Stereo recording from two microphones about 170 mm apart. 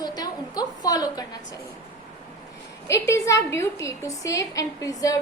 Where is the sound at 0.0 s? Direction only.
25° left (ahead or behind).